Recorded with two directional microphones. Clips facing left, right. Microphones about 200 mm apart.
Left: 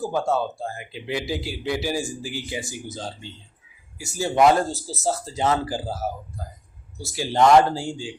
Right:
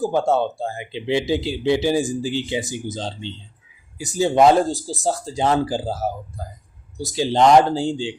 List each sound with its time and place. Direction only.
0.0 s speech: 20° right (ahead or behind)
7.0 s speech: 20° right (ahead or behind)